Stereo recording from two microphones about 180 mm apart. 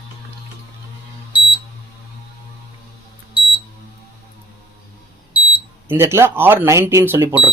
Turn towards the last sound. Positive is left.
turn(degrees=-15)  # may be behind; listen again after turning